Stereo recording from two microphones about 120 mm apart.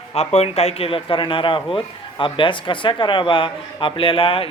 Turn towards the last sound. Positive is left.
turn(degrees=50)  # may be behind; listen again after turning